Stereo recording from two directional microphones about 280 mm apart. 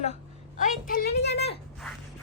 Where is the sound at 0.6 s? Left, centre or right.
Left.